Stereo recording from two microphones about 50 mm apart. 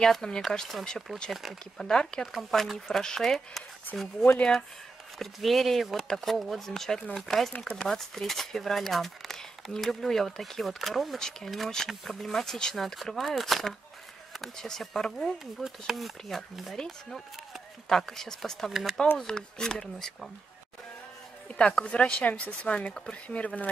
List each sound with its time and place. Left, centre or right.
0.0 s speech: centre
1.8 s speech: centre
2.5 s speech: centre
4.4 s speech: centre
5.2 s speech: centre
11.1 s speech: centre
15.2 s speech: centre
16.7 s speech: centre
18.7 s speech: centre
19.1 s speech: centre
21.5 s speech: left